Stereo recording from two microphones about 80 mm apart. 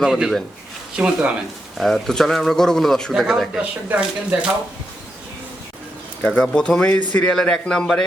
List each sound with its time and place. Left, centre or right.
0.0 s speech: centre
1.8 s speech: centre
3.6 s speech: centre
6.2 s a man's voice: centre